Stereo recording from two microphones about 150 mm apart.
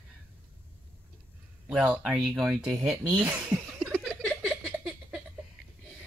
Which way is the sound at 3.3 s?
10° right (ahead or behind).